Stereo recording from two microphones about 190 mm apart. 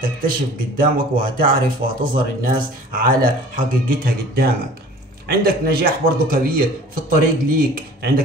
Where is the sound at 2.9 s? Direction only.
45° right (ahead or behind).